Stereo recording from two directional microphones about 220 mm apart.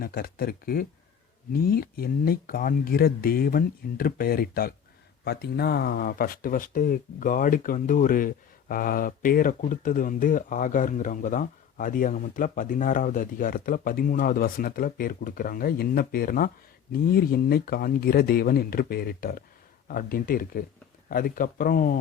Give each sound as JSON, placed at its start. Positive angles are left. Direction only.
{"t": 0.0, "sound": "speech", "side_deg": 40}